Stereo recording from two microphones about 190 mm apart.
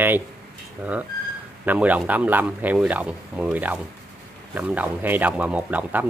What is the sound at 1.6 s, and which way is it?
Speech, 10° right (ahead or behind).